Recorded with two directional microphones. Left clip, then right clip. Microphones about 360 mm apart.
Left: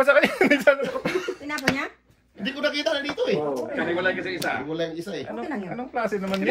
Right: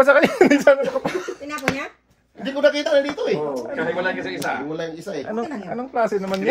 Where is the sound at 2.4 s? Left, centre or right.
Centre.